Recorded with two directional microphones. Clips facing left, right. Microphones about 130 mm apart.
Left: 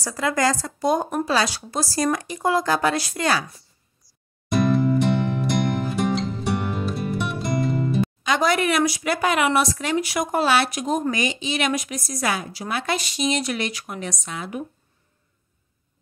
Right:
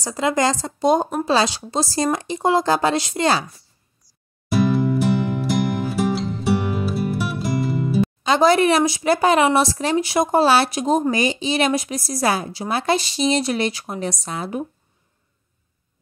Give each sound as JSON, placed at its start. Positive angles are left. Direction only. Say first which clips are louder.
{"t": 0.0, "sound": "speech", "louder": "right 2 dB", "side_deg": -20}
{"t": 4.5, "sound": "music", "louder": "right 1 dB", "side_deg": -5}
{"t": 8.2, "sound": "speech", "louder": "right 7 dB", "side_deg": -30}